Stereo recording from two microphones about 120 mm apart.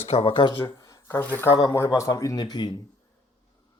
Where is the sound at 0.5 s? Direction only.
25° left (ahead or behind).